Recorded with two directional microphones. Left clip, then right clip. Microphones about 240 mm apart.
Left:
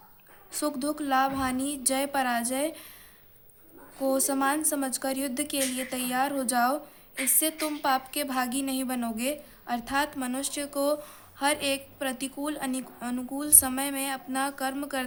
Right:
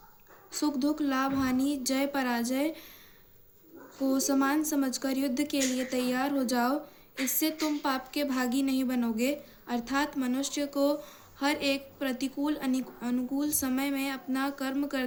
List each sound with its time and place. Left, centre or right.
0.6 s a woman's voice: left
4.2 s a woman's voice: left